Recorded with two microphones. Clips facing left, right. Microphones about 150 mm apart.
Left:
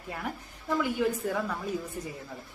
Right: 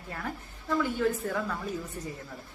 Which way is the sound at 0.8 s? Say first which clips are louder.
Even; 15° left (ahead or behind).